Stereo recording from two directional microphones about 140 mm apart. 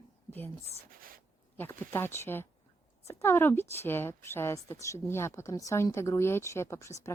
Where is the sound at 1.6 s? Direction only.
15° left (ahead or behind).